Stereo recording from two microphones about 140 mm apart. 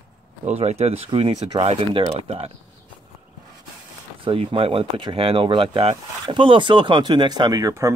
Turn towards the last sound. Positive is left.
turn(degrees=-25)  # may be behind; listen again after turning